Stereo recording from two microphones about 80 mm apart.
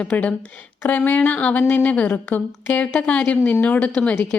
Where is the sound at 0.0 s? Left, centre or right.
Centre.